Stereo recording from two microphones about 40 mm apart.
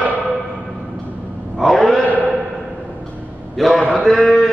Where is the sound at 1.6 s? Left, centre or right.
Centre.